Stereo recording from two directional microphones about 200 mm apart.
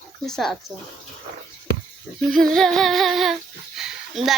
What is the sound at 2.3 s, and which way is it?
A child's voice, centre (ahead or behind).